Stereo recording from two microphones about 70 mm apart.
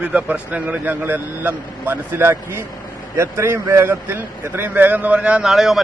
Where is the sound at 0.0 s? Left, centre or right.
Centre.